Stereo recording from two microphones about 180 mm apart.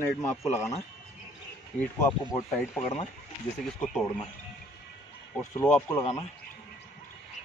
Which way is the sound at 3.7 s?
5° left (ahead or behind).